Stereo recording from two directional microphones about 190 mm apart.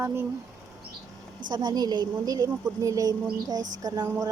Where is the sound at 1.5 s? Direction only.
20° right (ahead or behind).